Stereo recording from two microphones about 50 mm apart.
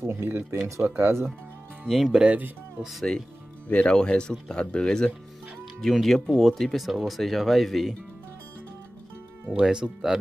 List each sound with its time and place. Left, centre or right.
0.0 s speech: right
1.9 s speech: centre
2.2 s speech: right
2.8 s speech: centre
3.6 s speech: left
5.8 s speech: centre
9.5 s speech: centre